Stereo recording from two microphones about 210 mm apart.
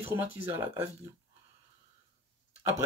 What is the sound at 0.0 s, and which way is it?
Speech, 10° right (ahead or behind).